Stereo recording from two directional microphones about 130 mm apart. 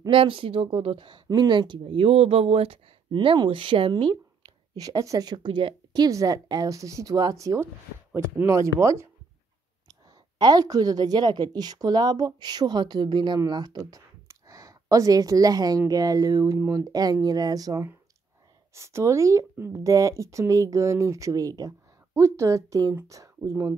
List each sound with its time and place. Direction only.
0.0 s a woman's voice: 40° right (ahead or behind)
4.7 s a woman's voice: 25° right (ahead or behind)
6.0 s speech: 25° right (ahead or behind)
10.4 s a woman's voice: 30° right (ahead or behind)